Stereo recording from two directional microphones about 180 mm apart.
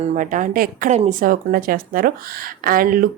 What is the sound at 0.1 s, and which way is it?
Speech, 45° right (ahead or behind).